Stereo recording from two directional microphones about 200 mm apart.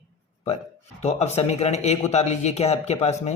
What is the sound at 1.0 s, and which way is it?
Speech, 35° left (ahead or behind).